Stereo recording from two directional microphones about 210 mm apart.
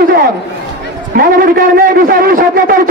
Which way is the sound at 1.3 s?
45° right (ahead or behind).